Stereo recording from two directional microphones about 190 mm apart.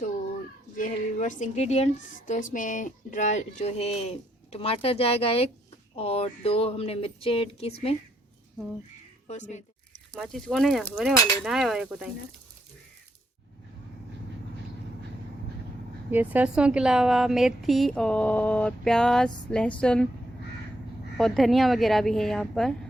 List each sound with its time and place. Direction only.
0.8 s a woman's voice: 40° left (ahead or behind)
9.2 s a woman's voice: 35° left (ahead or behind)
10.1 s a woman's voice: centre (ahead or behind)
16.1 s a woman's voice: 10° right (ahead or behind)
21.2 s a woman's voice: centre (ahead or behind)